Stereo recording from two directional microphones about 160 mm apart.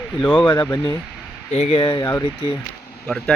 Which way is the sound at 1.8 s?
25° left (ahead or behind).